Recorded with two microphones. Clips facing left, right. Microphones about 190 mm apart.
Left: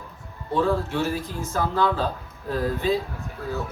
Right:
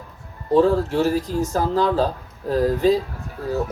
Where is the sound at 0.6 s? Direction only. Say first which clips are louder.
Right 3 dB; 40° right (ahead or behind).